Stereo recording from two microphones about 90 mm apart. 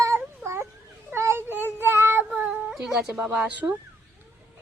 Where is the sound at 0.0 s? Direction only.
30° right (ahead or behind).